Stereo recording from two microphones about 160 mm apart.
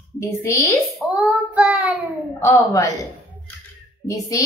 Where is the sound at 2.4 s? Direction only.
20° left (ahead or behind).